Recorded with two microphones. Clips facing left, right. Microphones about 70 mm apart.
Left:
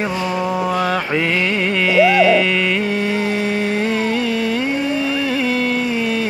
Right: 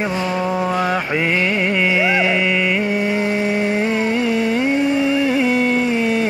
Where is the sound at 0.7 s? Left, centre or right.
Centre.